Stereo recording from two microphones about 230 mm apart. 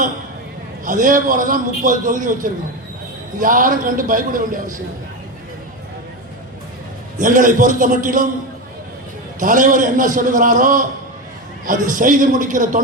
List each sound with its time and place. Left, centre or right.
0.9 s a man's voice: right
7.2 s a man's voice: right
9.4 s a man's voice: right